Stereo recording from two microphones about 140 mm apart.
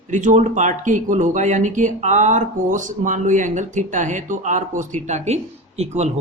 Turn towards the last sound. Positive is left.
turn(degrees=-50)  # may be behind; listen again after turning